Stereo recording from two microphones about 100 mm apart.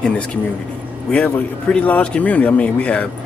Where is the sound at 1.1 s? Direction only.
15° left (ahead or behind).